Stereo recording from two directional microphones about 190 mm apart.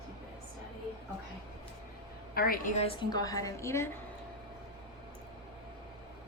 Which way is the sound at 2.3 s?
50° left (ahead or behind).